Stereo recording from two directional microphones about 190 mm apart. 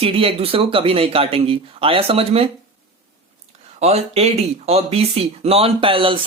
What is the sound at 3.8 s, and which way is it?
Speech, 35° right (ahead or behind).